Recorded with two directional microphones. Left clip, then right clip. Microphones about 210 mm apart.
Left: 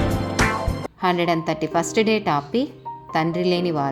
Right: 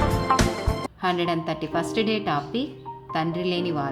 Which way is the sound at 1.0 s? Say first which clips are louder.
Left 5 dB; 30° left (ahead or behind).